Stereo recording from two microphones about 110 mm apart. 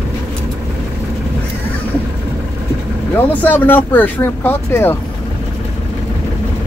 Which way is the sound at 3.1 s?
15° left (ahead or behind).